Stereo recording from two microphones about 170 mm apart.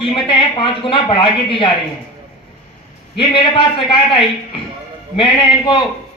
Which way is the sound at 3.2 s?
30° left (ahead or behind).